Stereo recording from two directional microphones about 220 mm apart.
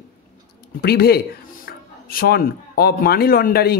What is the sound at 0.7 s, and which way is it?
Speech, 45° left (ahead or behind).